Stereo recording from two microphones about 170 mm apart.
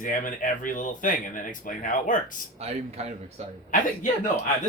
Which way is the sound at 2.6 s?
40° right (ahead or behind).